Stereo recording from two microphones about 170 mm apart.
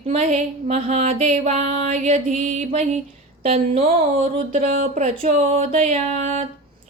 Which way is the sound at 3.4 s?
40° right (ahead or behind).